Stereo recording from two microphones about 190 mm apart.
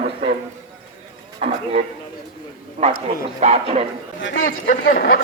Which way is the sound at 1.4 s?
35° right (ahead or behind).